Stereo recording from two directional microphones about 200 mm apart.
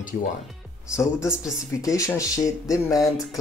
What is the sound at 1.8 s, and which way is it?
Speech, 15° left (ahead or behind).